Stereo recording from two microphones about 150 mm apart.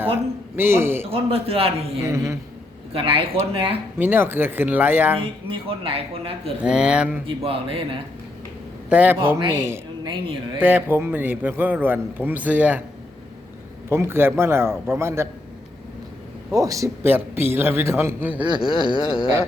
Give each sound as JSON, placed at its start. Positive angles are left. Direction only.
{"t": 0.5, "sound": "a man's voice", "side_deg": -15}
{"t": 1.1, "sound": "speech", "side_deg": -40}
{"t": 2.0, "sound": "a man's voice", "side_deg": -20}
{"t": 2.9, "sound": "speech", "side_deg": -35}
{"t": 3.9, "sound": "a man's voice", "side_deg": -15}
{"t": 5.5, "sound": "speech", "side_deg": -35}
{"t": 6.6, "sound": "a man's voice", "side_deg": -5}
{"t": 7.3, "sound": "speech", "side_deg": -40}
{"t": 8.9, "sound": "a man's voice", "side_deg": -10}
{"t": 10.0, "sound": "speech", "side_deg": -30}
{"t": 10.6, "sound": "a man's voice", "side_deg": -15}
{"t": 13.9, "sound": "a man's voice", "side_deg": -15}
{"t": 16.5, "sound": "a man's voice", "side_deg": -20}
{"t": 18.6, "sound": "a sound", "side_deg": 35}